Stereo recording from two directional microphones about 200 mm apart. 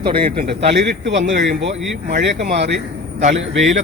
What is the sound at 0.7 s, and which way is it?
Speech, 55° right (ahead or behind).